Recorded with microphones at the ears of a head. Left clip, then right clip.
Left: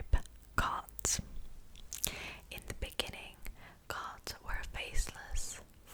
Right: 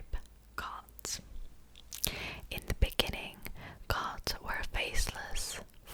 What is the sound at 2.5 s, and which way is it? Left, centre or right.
Whispering, right.